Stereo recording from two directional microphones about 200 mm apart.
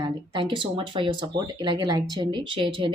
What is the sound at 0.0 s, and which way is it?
Speech, 25° right (ahead or behind).